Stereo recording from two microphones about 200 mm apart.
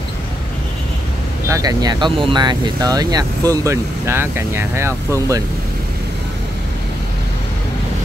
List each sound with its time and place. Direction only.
1.5 s speech: 20° right (ahead or behind)